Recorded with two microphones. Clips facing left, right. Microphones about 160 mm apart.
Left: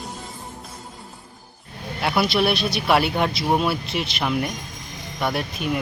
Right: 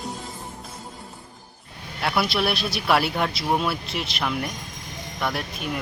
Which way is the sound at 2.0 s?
Centre (ahead or behind).